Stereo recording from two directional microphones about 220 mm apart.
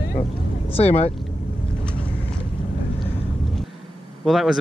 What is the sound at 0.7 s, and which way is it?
Speech, 25° left (ahead or behind).